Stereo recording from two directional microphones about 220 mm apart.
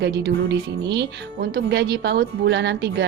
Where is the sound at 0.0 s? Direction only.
50° right (ahead or behind).